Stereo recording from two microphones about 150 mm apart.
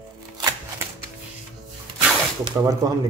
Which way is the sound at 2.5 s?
10° right (ahead or behind).